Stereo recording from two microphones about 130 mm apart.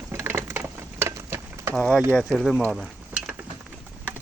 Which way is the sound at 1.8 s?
5° left (ahead or behind).